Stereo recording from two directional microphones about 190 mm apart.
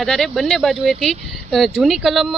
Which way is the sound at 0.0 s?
Centre (ahead or behind).